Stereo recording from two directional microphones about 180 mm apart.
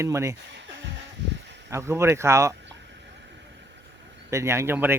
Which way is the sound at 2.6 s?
75° right (ahead or behind).